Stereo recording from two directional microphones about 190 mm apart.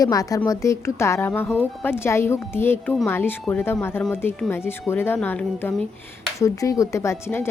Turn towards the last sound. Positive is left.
turn(degrees=15)  # may be behind; listen again after turning